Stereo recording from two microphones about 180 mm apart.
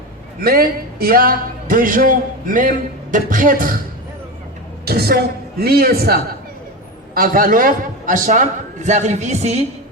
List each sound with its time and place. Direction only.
0.4 s speech: 55° right (ahead or behind)
4.9 s a woman's voice: 60° right (ahead or behind); by 9.6 s 35° right (ahead or behind)